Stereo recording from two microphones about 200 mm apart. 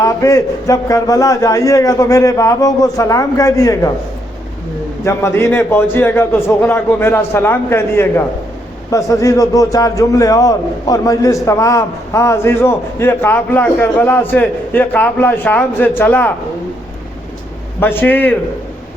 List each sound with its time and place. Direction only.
0.0 s a man's voice: 15° left (ahead or behind)
5.0 s a man's voice: 10° left (ahead or behind)
17.7 s a man's voice: 10° left (ahead or behind)